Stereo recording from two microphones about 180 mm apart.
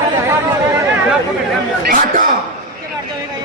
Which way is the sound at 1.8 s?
50° right (ahead or behind).